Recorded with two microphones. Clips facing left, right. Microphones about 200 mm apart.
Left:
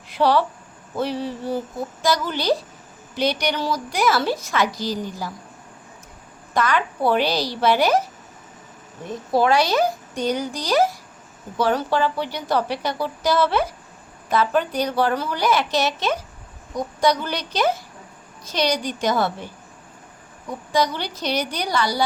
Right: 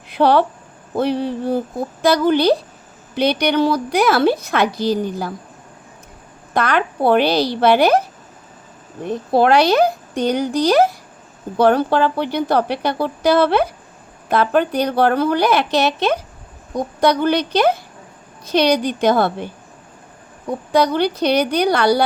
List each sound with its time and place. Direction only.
0.1 s a woman's voice: 60° right (ahead or behind)
6.5 s a woman's voice: 60° right (ahead or behind)
9.0 s a woman's voice: 65° right (ahead or behind)
20.5 s a woman's voice: 60° right (ahead or behind)